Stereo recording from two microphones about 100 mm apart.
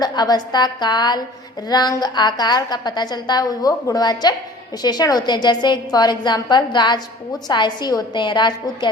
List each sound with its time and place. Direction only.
0.0 s a woman's voice: 40° left (ahead or behind)